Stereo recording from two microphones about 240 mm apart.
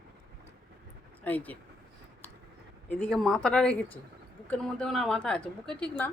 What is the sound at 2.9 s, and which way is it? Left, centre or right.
A woman's voice, centre.